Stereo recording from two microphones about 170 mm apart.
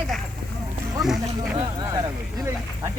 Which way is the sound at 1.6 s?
25° right (ahead or behind).